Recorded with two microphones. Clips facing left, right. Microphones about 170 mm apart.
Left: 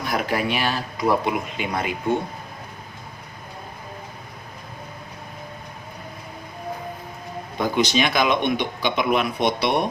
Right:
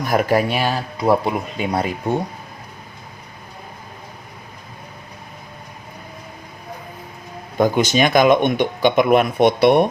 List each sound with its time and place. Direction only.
0.0 s speech: 45° right (ahead or behind)
7.6 s speech: 50° right (ahead or behind)